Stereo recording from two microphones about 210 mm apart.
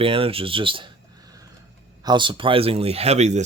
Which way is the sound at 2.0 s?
20° right (ahead or behind).